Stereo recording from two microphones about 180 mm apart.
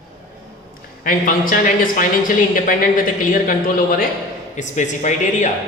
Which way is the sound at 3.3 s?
50° left (ahead or behind).